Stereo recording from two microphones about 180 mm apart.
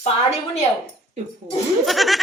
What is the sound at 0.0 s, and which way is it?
Speech, 35° left (ahead or behind).